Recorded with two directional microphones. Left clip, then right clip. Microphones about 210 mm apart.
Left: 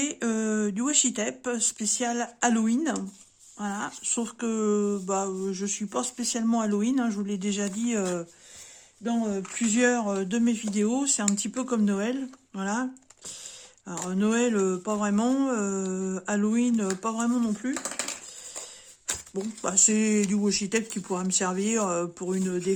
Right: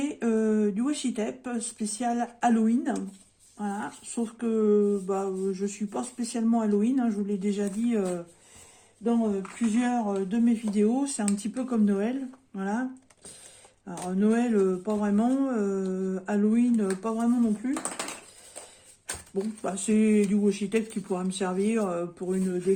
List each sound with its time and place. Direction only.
0.0 s speech: 45° left (ahead or behind)
9.0 s speech: 60° left (ahead or behind); by 12.8 s 40° left (ahead or behind)
13.8 s speech: 40° left (ahead or behind)
19.0 s speech: 40° left (ahead or behind)